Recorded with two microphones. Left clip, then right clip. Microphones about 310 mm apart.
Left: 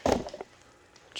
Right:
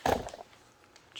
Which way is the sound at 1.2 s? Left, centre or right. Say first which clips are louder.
Left 6 dB; centre.